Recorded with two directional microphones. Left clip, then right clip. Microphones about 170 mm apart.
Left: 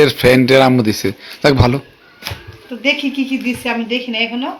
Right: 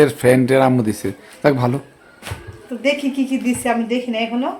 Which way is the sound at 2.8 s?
90° right.